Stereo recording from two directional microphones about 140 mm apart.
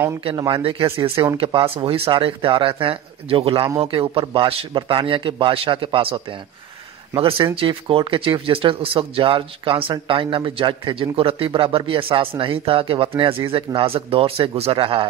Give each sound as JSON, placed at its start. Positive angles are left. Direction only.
{"t": 0.2, "sound": "speech", "side_deg": -35}